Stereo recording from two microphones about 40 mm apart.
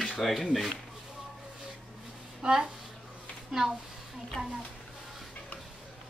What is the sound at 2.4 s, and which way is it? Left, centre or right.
A child's voice, centre.